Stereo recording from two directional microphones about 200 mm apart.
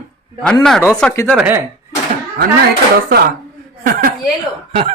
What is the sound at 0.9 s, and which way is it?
Speech, 5° left (ahead or behind).